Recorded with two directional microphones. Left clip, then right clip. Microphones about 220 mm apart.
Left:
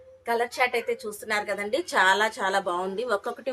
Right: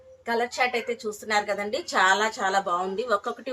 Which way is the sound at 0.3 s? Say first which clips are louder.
Even; 35° left (ahead or behind).